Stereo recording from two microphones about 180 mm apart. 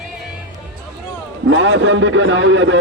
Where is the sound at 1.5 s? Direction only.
90° right.